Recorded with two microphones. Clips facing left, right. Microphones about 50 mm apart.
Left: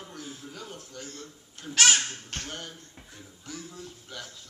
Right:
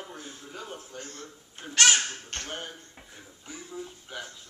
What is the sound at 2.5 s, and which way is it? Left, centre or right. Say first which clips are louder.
Speech: right 2 dB; centre.